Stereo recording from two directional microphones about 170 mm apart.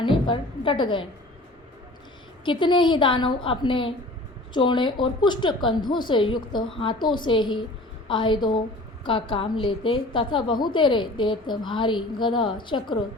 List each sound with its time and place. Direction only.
0.0 s a woman's voice: 30° left (ahead or behind)
2.4 s a woman's voice: 30° left (ahead or behind)